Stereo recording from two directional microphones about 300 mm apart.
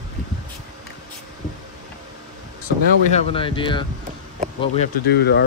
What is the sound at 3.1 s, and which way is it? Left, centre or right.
Speech, centre.